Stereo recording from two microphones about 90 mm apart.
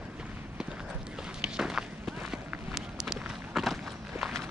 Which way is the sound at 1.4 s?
5° right (ahead or behind).